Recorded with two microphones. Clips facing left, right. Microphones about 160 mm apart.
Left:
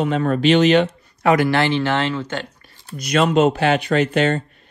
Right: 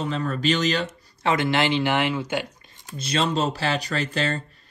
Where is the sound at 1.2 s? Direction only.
25° right (ahead or behind).